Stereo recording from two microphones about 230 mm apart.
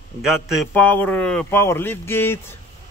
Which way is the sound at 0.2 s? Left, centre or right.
Centre.